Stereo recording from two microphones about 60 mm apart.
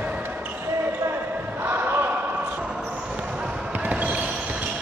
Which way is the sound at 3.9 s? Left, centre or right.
Right.